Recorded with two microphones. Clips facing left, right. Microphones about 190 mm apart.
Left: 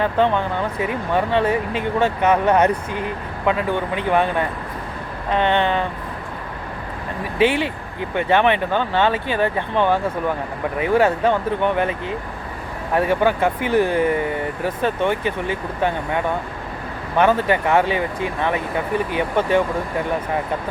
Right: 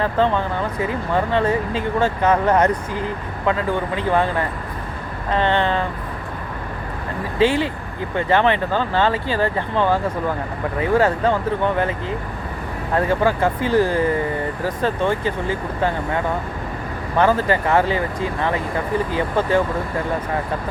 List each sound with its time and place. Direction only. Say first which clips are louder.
0.0 s speech: left 1 dB; 20° left (ahead or behind)
2.5 s speech: even; 10° left (ahead or behind)
8.1 s speech: even; 20° left (ahead or behind)